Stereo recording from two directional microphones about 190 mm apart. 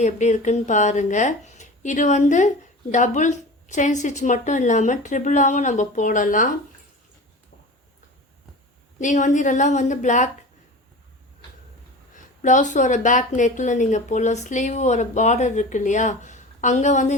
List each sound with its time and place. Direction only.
0.0 s speech: 40° left (ahead or behind)
9.0 s speech: 40° left (ahead or behind)
12.1 s speech: 40° left (ahead or behind)